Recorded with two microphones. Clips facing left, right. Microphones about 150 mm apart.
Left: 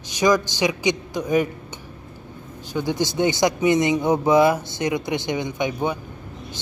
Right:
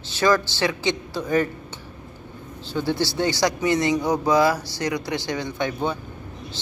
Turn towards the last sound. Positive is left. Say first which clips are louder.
# left 1 dB
turn(degrees=15)  # may be behind; listen again after turning